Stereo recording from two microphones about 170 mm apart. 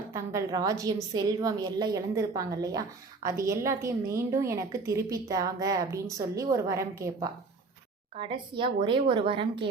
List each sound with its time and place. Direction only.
0.1 s a woman's voice: 15° right (ahead or behind)
8.1 s a woman's voice: 30° right (ahead or behind)